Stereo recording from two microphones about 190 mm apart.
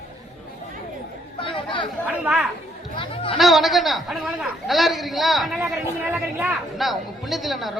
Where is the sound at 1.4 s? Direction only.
25° left (ahead or behind).